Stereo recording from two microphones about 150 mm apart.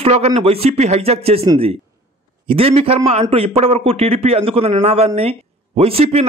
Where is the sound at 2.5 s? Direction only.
40° right (ahead or behind).